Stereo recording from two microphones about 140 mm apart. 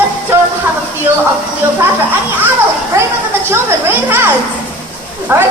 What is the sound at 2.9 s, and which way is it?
Speech, 20° right (ahead or behind).